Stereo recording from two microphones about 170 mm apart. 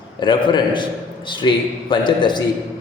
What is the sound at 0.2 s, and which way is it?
A man's voice, 30° left (ahead or behind).